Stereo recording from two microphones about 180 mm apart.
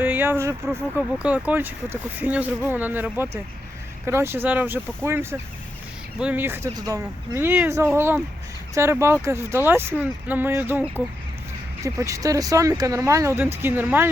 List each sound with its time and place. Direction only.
0.0 s speech: 10° right (ahead or behind)